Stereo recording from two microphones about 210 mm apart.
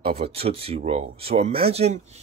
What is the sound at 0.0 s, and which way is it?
Speech, 30° right (ahead or behind).